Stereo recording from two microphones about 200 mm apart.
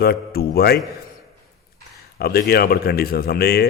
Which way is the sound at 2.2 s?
50° left (ahead or behind).